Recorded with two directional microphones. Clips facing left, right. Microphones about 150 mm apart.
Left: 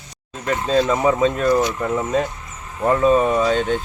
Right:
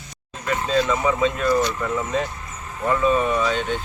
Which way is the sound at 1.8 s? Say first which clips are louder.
Left 3 dB; 35° left (ahead or behind).